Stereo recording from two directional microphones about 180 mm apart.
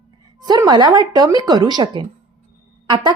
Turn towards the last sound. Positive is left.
turn(degrees=-25)  # may be behind; listen again after turning